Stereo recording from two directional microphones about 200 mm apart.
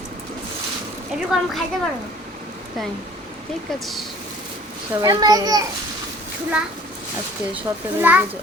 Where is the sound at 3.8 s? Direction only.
Centre (ahead or behind).